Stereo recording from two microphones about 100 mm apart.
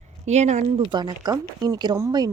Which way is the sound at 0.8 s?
50° right (ahead or behind).